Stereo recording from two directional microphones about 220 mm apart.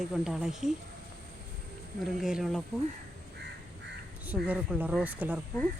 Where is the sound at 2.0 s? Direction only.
Centre (ahead or behind).